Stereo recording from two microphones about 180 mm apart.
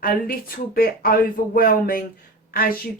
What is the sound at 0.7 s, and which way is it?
Speech, 55° left (ahead or behind).